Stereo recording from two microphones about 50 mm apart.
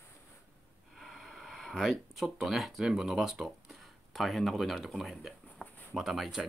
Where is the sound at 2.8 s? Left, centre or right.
Centre.